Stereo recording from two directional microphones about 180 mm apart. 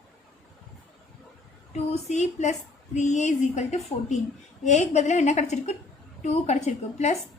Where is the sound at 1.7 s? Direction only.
40° left (ahead or behind).